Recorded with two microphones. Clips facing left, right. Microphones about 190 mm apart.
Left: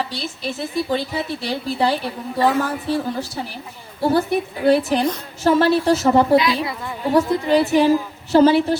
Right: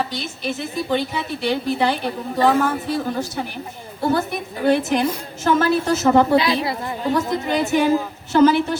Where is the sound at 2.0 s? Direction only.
40° right (ahead or behind).